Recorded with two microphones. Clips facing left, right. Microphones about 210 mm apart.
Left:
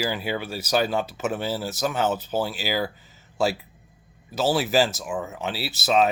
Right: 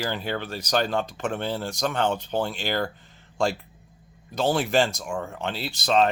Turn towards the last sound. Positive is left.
turn(degrees=5)  # may be behind; listen again after turning